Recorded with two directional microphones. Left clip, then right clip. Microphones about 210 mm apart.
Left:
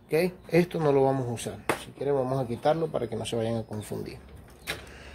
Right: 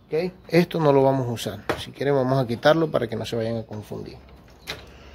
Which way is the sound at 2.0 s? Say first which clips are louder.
Right 7 dB; 35° right (ahead or behind).